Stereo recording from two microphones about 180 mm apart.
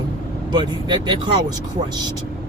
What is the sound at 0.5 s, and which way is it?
Speech, 25° right (ahead or behind).